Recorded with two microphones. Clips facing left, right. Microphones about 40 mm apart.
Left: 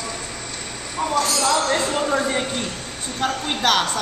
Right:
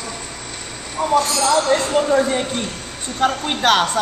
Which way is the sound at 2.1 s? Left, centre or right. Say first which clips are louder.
Right 4 dB; centre.